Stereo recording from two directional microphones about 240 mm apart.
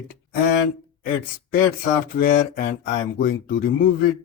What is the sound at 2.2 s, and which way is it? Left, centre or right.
Speech, left.